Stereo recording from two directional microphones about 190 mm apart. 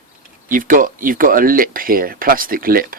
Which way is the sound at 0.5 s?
45° right (ahead or behind).